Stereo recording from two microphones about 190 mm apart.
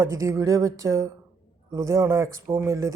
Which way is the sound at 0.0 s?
15° right (ahead or behind).